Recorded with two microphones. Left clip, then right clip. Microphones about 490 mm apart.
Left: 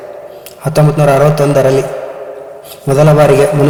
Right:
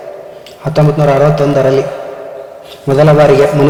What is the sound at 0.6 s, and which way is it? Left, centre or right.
A man's voice, left.